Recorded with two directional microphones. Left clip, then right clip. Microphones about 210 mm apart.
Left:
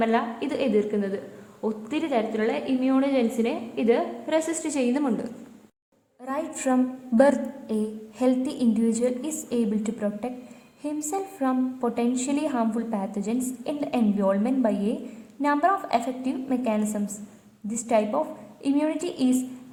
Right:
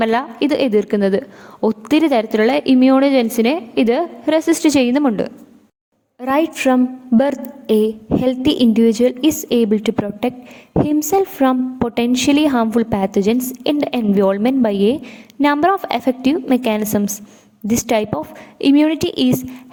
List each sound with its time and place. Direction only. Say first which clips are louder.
0.0 s a woman's voice: right 8 dB; 55° right (ahead or behind)